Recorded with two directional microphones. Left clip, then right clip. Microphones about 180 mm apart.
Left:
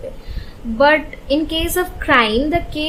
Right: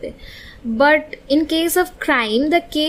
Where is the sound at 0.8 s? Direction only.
40° right (ahead or behind).